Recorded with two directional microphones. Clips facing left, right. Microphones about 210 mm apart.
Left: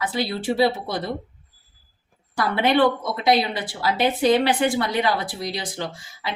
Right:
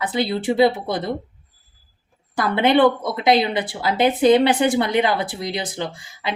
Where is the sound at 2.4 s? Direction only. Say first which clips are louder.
Right 3 dB; 20° right (ahead or behind).